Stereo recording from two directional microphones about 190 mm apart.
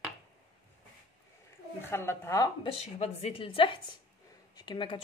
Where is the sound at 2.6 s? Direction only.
35° left (ahead or behind).